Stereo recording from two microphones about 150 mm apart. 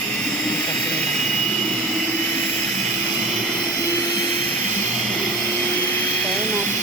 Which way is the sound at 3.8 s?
15° left (ahead or behind).